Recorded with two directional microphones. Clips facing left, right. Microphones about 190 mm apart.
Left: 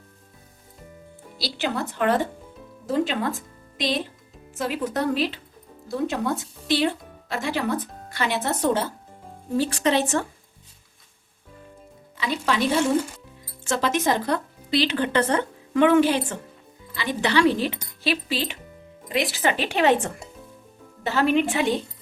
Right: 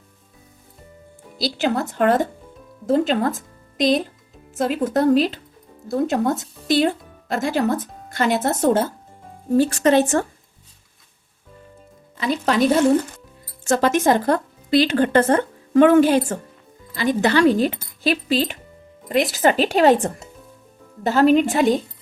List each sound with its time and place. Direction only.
1.4 s speech: 45° right (ahead or behind)
12.1 s speech: 45° right (ahead or behind)
13.7 s a woman's voice: 50° right (ahead or behind)